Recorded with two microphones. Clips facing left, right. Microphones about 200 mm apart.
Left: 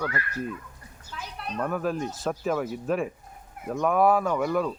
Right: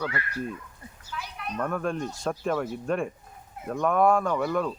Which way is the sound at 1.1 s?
35° left (ahead or behind).